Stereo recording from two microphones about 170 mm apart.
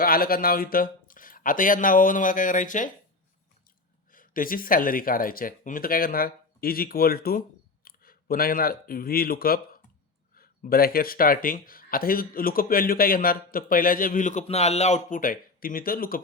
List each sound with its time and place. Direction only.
0.0 s speech: 60° left (ahead or behind)
4.1 s speech: 55° left (ahead or behind)
14.4 s speech: 40° left (ahead or behind); by 16.2 s 55° left (ahead or behind)